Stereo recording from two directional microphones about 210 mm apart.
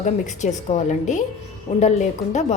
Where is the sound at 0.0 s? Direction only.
35° left (ahead or behind).